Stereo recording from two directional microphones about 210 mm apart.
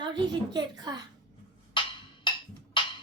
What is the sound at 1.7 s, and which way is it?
Music, 20° left (ahead or behind).